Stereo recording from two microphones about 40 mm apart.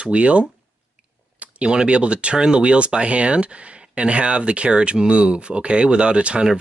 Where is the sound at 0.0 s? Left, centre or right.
Right.